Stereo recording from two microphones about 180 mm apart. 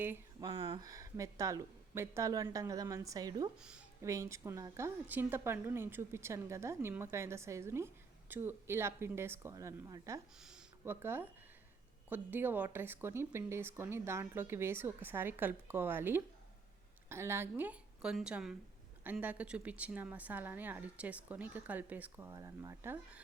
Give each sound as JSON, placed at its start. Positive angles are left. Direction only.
{"t": 0.0, "sound": "speech", "side_deg": -10}
{"t": 0.4, "sound": "speech", "side_deg": -30}
{"t": 3.6, "sound": "speech", "side_deg": -5}
{"t": 4.0, "sound": "speech", "side_deg": -15}
{"t": 10.4, "sound": "speech", "side_deg": -10}